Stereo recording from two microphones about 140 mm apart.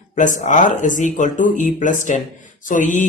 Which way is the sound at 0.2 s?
65° left (ahead or behind).